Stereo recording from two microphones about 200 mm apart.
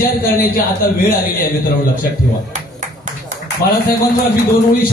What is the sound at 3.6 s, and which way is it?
Speech, 45° left (ahead or behind).